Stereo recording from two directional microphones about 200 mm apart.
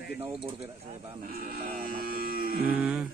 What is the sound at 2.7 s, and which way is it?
Speech, 5° right (ahead or behind).